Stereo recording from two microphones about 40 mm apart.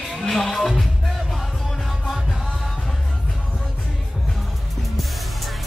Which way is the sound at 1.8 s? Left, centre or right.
Centre.